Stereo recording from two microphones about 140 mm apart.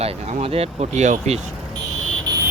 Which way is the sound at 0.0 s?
50° right (ahead or behind).